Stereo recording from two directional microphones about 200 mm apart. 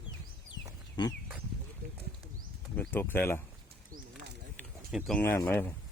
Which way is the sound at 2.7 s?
10° left (ahead or behind).